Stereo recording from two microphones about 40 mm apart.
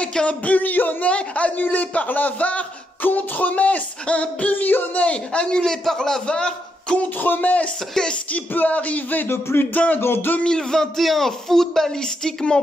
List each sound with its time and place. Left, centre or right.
0.0 s music: left
0.5 s speech: left
1.0 s a man's voice: left
3.0 s speech: left
5.7 s speech: centre
6.2 s a man's voice: left
7.0 s a man's voice: left
9.2 s a sound: left
10.4 s speech: centre
11.0 s speech: centre